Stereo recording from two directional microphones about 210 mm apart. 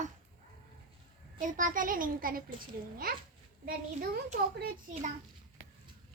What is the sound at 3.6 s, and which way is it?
A child's voice, 45° right (ahead or behind).